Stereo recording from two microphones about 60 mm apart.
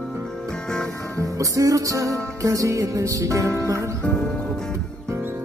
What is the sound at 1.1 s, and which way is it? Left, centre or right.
Music, right.